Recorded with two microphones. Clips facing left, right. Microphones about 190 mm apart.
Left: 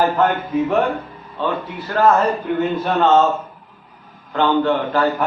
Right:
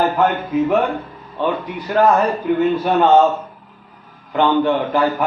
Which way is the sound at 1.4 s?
15° right (ahead or behind).